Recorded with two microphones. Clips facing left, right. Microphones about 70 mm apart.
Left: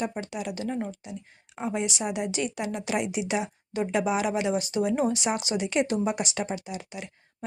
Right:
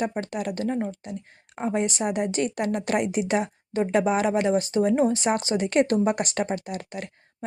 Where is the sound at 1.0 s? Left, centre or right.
Right.